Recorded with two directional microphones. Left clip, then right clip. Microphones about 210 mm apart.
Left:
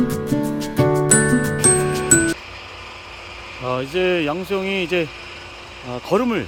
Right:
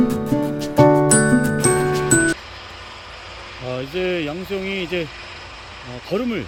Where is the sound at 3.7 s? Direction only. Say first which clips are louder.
Left 4 dB; 5° left (ahead or behind).